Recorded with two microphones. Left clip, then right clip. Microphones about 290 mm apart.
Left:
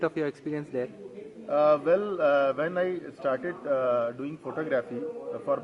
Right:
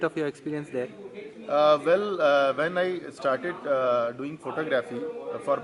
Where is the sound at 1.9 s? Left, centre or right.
Left.